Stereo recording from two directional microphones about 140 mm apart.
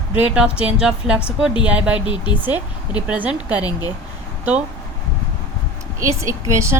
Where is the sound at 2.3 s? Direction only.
35° left (ahead or behind).